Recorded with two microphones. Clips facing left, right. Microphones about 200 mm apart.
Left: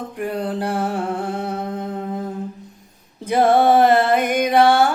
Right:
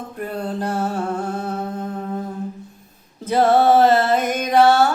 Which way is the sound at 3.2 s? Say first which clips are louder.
Even; 15° left (ahead or behind).